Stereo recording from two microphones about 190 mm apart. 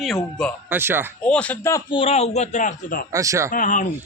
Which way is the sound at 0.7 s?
10° right (ahead or behind).